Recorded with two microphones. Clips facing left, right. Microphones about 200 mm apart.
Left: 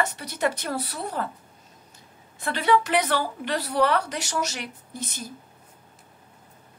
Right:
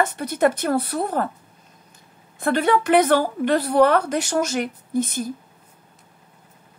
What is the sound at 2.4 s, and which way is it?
A woman's voice, 50° right (ahead or behind).